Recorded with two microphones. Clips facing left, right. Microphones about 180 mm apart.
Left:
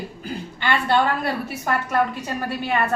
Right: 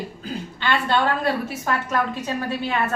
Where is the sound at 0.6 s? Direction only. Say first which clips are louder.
Left 1 dB; 10° left (ahead or behind).